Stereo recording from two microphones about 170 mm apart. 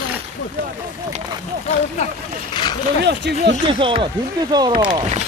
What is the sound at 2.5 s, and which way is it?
Speech, 25° left (ahead or behind).